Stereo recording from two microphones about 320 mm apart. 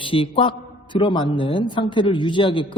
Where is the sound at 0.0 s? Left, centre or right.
Centre.